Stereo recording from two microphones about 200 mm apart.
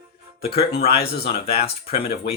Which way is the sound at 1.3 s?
30° left (ahead or behind).